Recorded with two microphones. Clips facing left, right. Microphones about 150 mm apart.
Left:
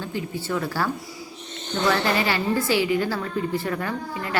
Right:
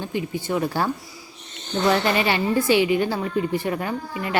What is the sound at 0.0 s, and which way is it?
Speech, 20° right (ahead or behind).